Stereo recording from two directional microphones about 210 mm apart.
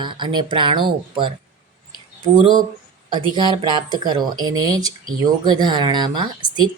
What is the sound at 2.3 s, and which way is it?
A woman's voice, 20° right (ahead or behind).